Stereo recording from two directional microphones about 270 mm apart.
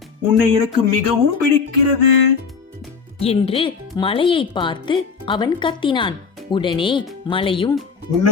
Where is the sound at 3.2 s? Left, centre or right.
Left.